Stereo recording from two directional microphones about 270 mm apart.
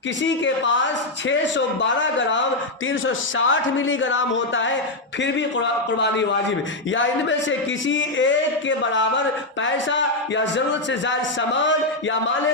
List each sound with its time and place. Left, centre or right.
0.3 s a man's voice: left
6.9 s a man's voice: left